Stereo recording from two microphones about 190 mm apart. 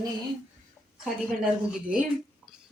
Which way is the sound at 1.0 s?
Centre (ahead or behind).